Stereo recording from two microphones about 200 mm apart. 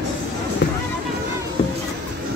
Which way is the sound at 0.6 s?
60° left (ahead or behind).